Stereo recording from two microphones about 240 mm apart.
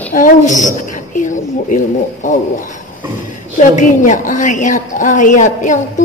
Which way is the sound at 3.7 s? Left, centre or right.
Left.